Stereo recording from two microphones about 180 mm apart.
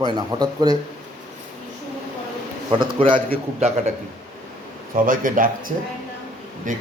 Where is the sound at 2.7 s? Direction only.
30° right (ahead or behind).